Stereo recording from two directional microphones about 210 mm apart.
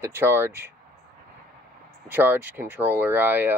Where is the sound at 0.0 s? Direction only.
10° right (ahead or behind).